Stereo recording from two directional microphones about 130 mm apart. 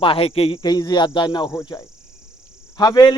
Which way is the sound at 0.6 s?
30° left (ahead or behind).